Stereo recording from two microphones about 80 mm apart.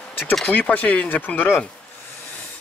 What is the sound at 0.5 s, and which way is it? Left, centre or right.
Speech, left.